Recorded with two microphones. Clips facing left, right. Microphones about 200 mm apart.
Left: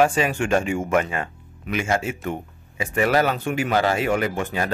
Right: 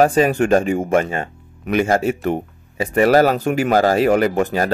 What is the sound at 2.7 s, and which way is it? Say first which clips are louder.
A man's voice: right 7 dB; 40° right (ahead or behind).